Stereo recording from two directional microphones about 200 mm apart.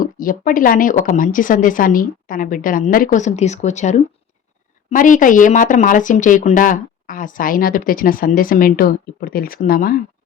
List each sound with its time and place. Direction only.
0.0 s speech: 45° left (ahead or behind)